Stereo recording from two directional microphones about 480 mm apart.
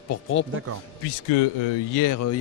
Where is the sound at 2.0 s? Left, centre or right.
Left.